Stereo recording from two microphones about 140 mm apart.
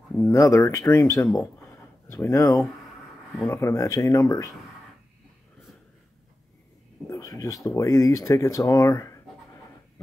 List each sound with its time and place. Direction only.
0.3 s speech: 20° left (ahead or behind)
7.1 s speech: 25° left (ahead or behind)